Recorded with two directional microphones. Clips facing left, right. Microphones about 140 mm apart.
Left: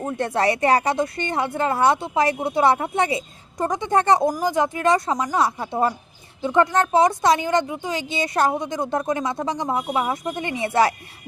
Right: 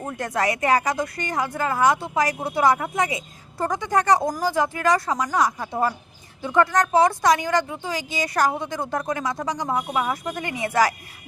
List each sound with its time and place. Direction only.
0.0 s speech: 25° left (ahead or behind)
5.1 s speech: 15° left (ahead or behind)
5.4 s speech: 25° left (ahead or behind)